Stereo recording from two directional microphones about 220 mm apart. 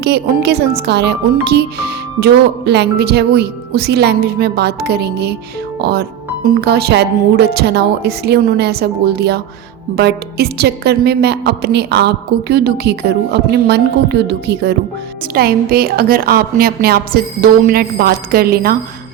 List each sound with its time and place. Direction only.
0.0 s speech: 50° right (ahead or behind)